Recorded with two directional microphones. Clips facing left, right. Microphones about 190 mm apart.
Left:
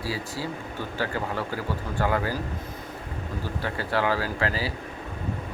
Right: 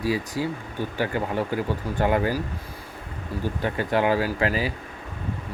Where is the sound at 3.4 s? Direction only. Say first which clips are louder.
Right 6 dB; 20° right (ahead or behind).